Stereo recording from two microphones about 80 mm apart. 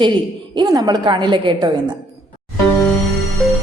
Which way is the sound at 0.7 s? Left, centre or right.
Right.